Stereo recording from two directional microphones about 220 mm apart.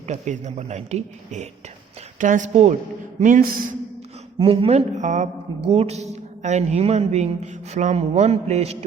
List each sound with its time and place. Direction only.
0.1 s a woman's voice: 30° right (ahead or behind)